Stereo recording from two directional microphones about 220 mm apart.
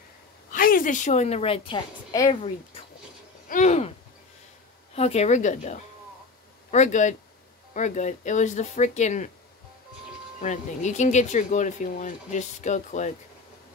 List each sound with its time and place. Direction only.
0.5 s a woman's voice: 40° left (ahead or behind)
3.4 s a sound: 35° left (ahead or behind)
4.9 s speech: 30° left (ahead or behind)
10.4 s speech: 35° left (ahead or behind)